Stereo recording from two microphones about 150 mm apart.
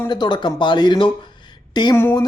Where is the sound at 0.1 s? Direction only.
30° left (ahead or behind).